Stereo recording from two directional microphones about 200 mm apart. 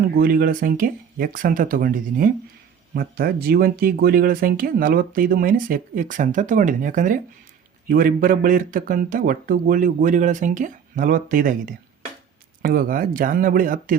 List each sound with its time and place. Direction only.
0.2 s speech: 50° right (ahead or behind)